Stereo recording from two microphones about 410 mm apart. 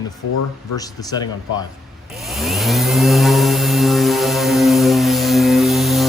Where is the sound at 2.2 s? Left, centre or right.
Centre.